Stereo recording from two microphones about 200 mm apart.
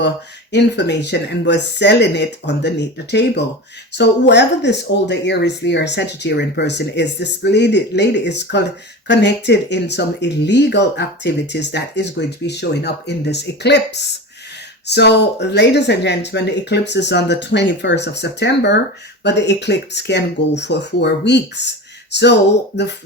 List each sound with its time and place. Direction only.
0.5 s speech: 60° left (ahead or behind)